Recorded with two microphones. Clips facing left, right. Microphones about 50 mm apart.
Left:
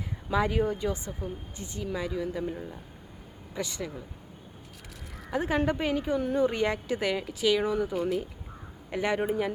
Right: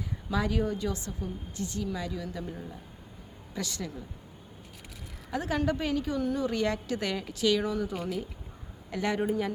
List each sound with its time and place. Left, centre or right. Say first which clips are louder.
0.3 s a woman's voice: left 3 dB; left
5.3 s a woman's voice: left 2 dB; left